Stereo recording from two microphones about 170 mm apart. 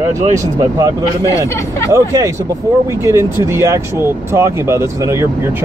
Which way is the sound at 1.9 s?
20° right (ahead or behind).